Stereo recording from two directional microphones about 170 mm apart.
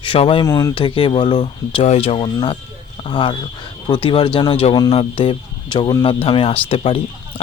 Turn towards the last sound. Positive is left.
turn(degrees=35)  # may be behind; listen again after turning